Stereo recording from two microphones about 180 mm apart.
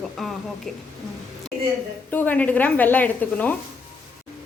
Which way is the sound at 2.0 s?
10° left (ahead or behind).